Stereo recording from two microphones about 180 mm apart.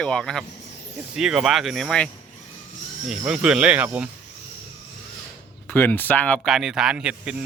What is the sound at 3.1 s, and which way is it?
Speech, 5° right (ahead or behind).